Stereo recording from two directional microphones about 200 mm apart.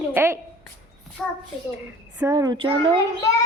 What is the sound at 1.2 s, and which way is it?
Speech, centre (ahead or behind).